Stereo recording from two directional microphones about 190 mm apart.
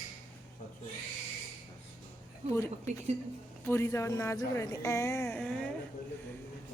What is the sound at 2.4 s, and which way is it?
Speech, 35° right (ahead or behind).